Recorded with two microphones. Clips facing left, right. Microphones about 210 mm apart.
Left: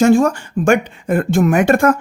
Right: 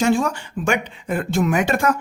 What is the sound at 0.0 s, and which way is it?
Speech, 45° left (ahead or behind).